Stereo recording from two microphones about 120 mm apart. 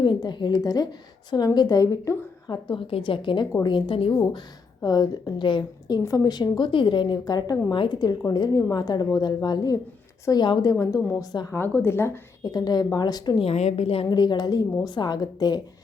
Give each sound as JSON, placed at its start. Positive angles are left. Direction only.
{"t": 0.0, "sound": "a woman's voice", "side_deg": 40}
{"t": 2.6, "sound": "a woman's voice", "side_deg": 45}
{"t": 6.0, "sound": "a woman's voice", "side_deg": 30}
{"t": 11.5, "sound": "a woman's voice", "side_deg": 15}
{"t": 12.4, "sound": "a woman's voice", "side_deg": 35}
{"t": 13.4, "sound": "a woman's voice", "side_deg": 60}
{"t": 14.1, "sound": "a woman's voice", "side_deg": 35}